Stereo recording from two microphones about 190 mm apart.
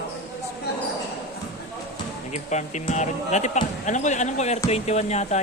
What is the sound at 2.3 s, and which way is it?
Speech, 35° left (ahead or behind).